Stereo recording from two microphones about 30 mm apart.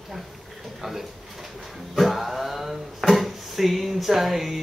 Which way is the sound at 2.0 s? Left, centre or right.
Centre.